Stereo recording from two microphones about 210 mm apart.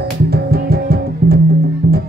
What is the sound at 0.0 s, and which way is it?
Music, 50° right (ahead or behind).